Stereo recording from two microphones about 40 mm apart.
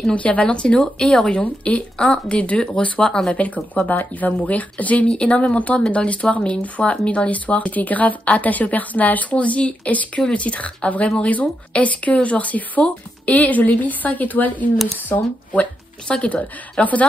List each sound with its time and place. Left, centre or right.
0.1 s speech: left
1.4 s speech: left
3.0 s speech: centre
3.3 s speech: left
5.0 s speech: left